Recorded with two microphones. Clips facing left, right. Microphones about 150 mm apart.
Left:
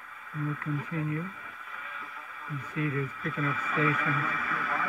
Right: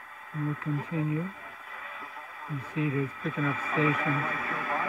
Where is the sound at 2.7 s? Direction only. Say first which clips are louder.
Right 2 dB; 15° right (ahead or behind).